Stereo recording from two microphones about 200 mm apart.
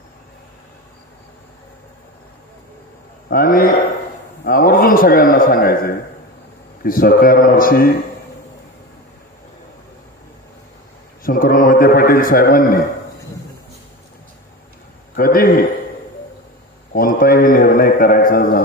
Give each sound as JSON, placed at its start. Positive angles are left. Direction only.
{"t": 3.2, "sound": "a man's voice", "side_deg": 45}
{"t": 11.2, "sound": "a man's voice", "side_deg": 45}
{"t": 15.1, "sound": "a man's voice", "side_deg": 45}
{"t": 16.9, "sound": "a man's voice", "side_deg": 45}